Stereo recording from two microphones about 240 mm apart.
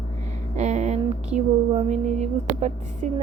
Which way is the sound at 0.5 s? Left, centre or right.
Right.